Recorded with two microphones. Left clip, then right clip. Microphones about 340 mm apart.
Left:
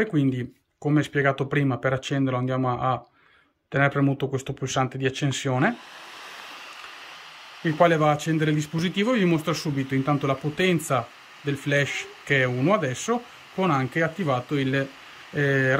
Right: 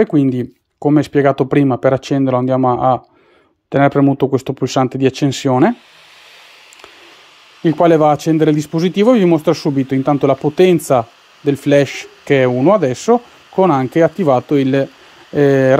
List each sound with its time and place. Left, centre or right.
0.0 s speech: centre
7.8 s speech: centre